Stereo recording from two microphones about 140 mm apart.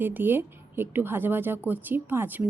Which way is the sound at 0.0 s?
15° right (ahead or behind).